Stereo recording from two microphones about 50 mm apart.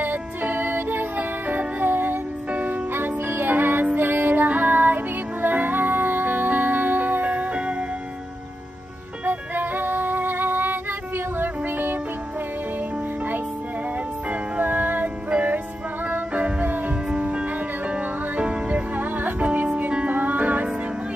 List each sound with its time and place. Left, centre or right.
0.0 s music: right
9.2 s music: right
14.6 s music: right
15.2 s music: right
17.1 s music: right